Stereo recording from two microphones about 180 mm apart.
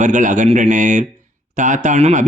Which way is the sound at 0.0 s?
45° right (ahead or behind).